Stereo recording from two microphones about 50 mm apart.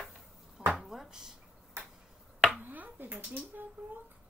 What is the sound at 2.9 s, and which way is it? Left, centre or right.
Speech, right.